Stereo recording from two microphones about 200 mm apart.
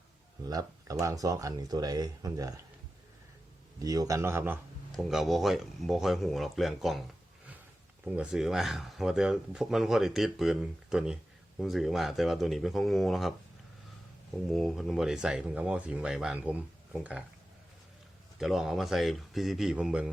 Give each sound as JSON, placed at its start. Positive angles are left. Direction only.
{"t": 0.4, "sound": "speech", "side_deg": -15}
{"t": 3.8, "sound": "speech", "side_deg": -20}
{"t": 8.0, "sound": "speech", "side_deg": -5}
{"t": 14.5, "sound": "speech", "side_deg": 0}
{"t": 18.3, "sound": "speech", "side_deg": 0}